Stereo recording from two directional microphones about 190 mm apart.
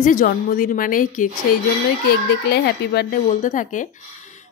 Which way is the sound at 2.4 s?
60° left (ahead or behind).